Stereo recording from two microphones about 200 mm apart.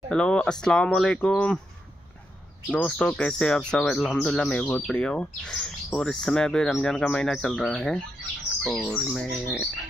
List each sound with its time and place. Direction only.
0.1 s speech: 5° left (ahead or behind)
2.7 s speech: 5° left (ahead or behind)